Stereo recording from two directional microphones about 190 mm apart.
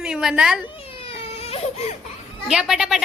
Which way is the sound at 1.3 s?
30° left (ahead or behind).